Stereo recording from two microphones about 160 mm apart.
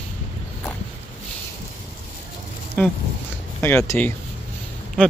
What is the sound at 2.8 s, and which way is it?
Speech, 10° left (ahead or behind).